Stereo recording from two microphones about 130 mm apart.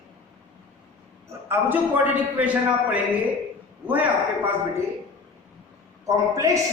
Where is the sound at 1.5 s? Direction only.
15° right (ahead or behind).